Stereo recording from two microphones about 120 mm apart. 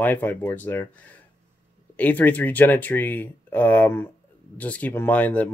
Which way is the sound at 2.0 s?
15° left (ahead or behind).